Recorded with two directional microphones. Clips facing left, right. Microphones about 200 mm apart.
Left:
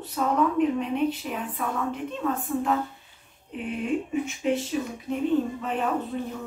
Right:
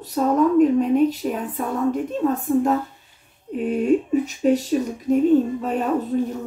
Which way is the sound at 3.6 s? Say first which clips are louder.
Right 9 dB; 40° right (ahead or behind).